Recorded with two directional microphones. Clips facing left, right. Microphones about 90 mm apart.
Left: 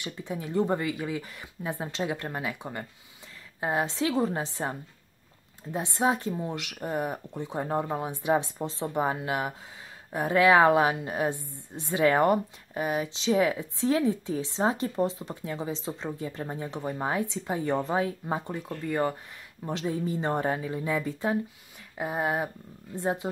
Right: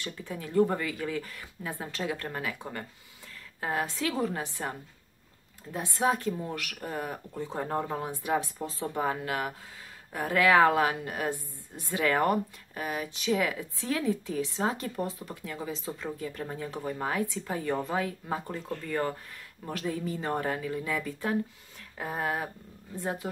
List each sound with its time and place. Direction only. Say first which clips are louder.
0.0 s a woman's voice: left 3 dB; 20° left (ahead or behind)